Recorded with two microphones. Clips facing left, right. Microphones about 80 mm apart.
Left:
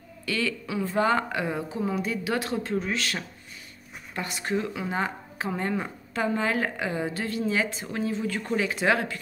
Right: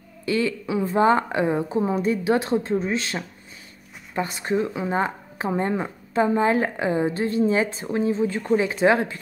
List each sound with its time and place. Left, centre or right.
0.2 s a woman's voice: right